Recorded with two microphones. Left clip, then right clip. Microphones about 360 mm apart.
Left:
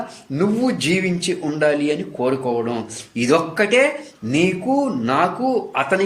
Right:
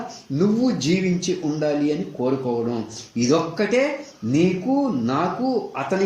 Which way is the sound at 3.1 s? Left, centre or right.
Left.